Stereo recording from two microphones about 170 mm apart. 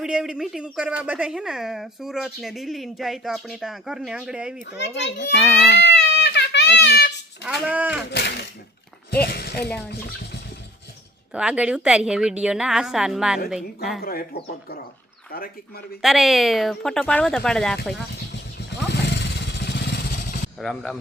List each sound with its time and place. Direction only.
0.0 s speech: 5° right (ahead or behind)
4.8 s a child's voice: 90° left
5.4 s speech: centre (ahead or behind)
5.8 s baby cry: 90° left
6.8 s speech: 85° left
7.4 s speech: 10° right (ahead or behind)
8.1 s speech: 70° left (ahead or behind)
11.3 s speech: 5° right (ahead or behind)
14.0 s speech: 65° left (ahead or behind)
16.0 s speech: centre (ahead or behind)
18.7 s vehicle: 85° left; by 20.5 s 70° left (ahead or behind)
20.6 s speech: centre (ahead or behind)